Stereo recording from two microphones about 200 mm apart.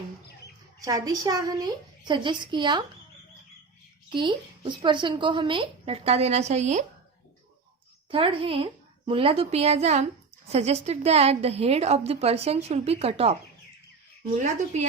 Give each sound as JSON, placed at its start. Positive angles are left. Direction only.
{"t": 0.9, "sound": "a woman's voice", "side_deg": -15}
{"t": 4.1, "sound": "a woman's voice", "side_deg": -25}
{"t": 8.1, "sound": "a woman's voice", "side_deg": -25}
{"t": 14.3, "sound": "a woman's voice", "side_deg": -35}